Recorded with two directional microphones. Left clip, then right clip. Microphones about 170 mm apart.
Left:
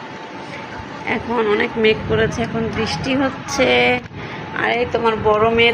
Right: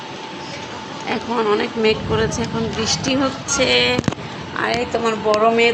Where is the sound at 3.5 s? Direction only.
20° left (ahead or behind).